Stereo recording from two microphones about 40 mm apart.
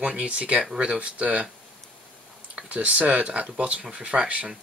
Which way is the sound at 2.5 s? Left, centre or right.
Right.